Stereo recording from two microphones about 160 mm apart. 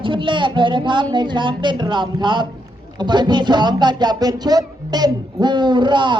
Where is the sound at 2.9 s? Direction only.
25° right (ahead or behind).